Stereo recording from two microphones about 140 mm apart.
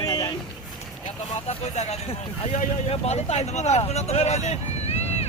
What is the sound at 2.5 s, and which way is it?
Speech, 50° left (ahead or behind).